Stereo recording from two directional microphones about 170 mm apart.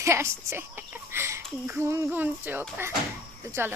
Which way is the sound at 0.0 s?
15° right (ahead or behind).